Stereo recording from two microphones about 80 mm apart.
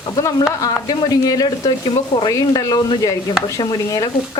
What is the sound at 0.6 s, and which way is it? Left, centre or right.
Speech, left.